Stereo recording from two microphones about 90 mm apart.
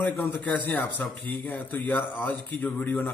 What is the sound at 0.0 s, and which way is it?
A man's voice, 20° left (ahead or behind).